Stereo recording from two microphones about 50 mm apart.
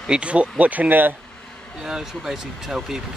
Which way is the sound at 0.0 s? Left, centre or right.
Centre.